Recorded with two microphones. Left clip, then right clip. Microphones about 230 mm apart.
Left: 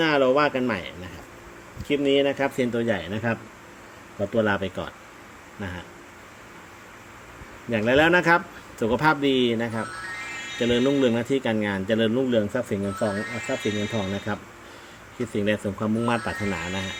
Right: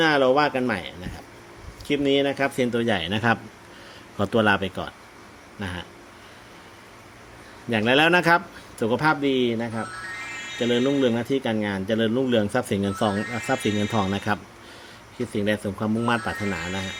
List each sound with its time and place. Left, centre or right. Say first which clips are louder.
0.0 s speech: right 1 dB; centre
7.7 s speech: even; centre
8.8 s speech: even; centre
12.6 s speech: right 2 dB; right
12.9 s speech: right 2 dB; centre
15.3 s speech: even; centre